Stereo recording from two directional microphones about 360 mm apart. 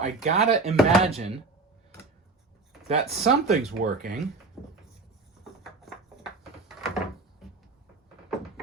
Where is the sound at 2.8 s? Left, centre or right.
Centre.